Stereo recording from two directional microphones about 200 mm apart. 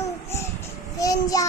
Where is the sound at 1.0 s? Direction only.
15° left (ahead or behind).